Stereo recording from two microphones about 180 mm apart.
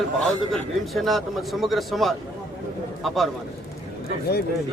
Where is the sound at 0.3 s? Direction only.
Centre (ahead or behind).